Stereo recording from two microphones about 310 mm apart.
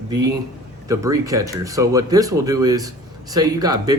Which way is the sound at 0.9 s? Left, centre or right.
Centre.